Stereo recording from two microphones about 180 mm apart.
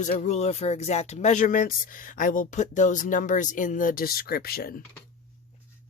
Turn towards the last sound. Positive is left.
turn(degrees=55)  # may be behind; listen again after turning